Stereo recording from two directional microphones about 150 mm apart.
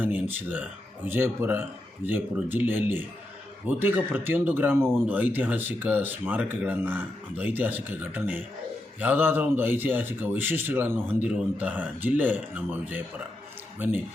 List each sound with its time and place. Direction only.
0.0 s a man's voice: 10° right (ahead or behind)